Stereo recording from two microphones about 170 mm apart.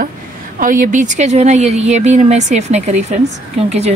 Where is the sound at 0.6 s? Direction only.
55° right (ahead or behind).